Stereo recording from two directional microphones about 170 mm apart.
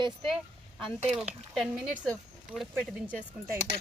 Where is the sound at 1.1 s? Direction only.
Centre (ahead or behind).